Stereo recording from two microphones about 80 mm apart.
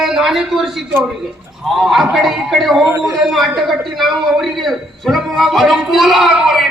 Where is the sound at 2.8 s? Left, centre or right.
Right.